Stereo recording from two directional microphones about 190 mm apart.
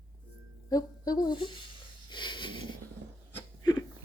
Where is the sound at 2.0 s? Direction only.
25° left (ahead or behind).